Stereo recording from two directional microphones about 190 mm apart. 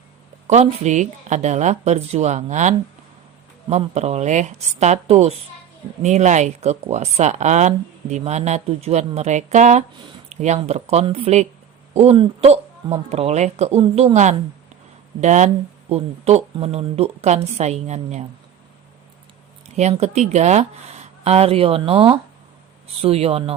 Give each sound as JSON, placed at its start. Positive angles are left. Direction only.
{"t": 0.4, "sound": "speech", "side_deg": -35}
{"t": 19.6, "sound": "speech", "side_deg": -35}